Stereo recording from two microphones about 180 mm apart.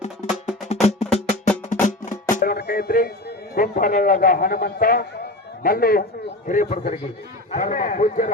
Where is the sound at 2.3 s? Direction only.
60° left (ahead or behind).